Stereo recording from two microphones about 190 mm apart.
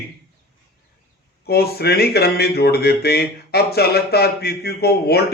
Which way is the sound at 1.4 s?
55° left (ahead or behind).